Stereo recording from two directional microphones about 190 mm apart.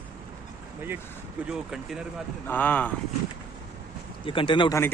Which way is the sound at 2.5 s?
10° left (ahead or behind).